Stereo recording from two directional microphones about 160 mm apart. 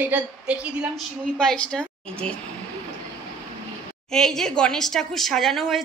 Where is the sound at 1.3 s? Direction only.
5° left (ahead or behind).